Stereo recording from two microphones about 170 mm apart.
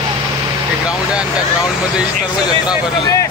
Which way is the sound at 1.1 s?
5° right (ahead or behind).